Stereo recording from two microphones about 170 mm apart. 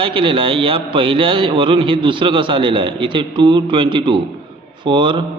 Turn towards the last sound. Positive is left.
turn(degrees=-30)  # may be behind; listen again after turning